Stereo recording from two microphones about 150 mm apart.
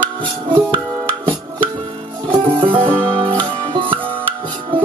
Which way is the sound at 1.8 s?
35° right (ahead or behind).